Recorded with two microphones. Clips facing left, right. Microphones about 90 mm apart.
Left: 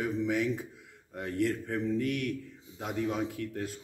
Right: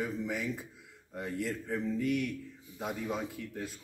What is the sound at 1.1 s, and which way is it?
Speech, 10° right (ahead or behind).